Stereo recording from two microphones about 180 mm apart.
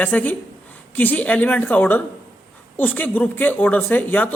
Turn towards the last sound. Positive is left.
turn(degrees=10)  # may be behind; listen again after turning